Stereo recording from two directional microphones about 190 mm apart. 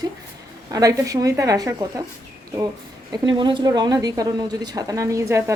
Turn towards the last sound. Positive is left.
turn(degrees=-15)  # may be behind; listen again after turning